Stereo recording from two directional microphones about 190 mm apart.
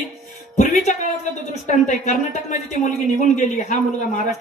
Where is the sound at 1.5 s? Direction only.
40° left (ahead or behind).